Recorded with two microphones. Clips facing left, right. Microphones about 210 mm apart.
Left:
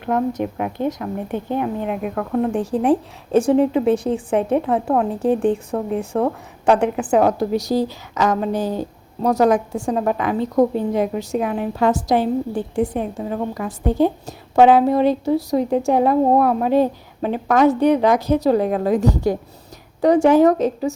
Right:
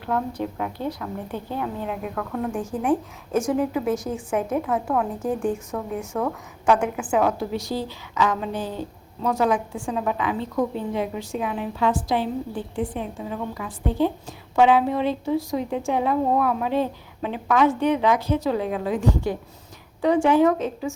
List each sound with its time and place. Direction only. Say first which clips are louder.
0.2 s a woman's voice: left 6 dB; 20° left (ahead or behind)
2.1 s a woman's voice: left 8 dB; 30° left (ahead or behind)